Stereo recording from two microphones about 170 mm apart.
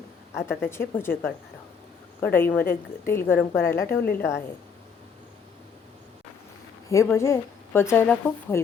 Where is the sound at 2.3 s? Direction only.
10° left (ahead or behind).